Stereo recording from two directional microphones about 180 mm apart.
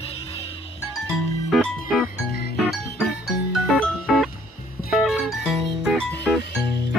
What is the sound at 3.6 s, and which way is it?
Music, 5° right (ahead or behind).